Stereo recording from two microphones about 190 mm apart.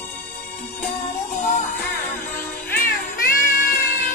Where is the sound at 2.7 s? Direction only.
55° left (ahead or behind).